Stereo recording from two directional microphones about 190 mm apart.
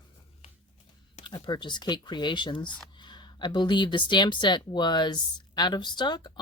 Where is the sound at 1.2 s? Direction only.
25° left (ahead or behind).